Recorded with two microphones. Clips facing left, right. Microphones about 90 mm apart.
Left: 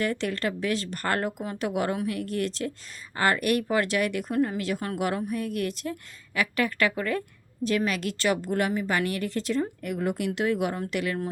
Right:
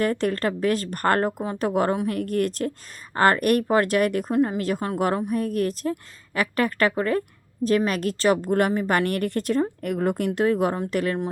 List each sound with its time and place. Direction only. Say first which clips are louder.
0.0 s a woman's voice: right 5 dB; 40° right (ahead or behind)